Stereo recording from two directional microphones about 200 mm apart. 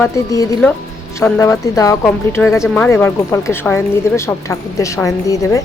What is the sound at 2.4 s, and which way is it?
Speech, centre (ahead or behind).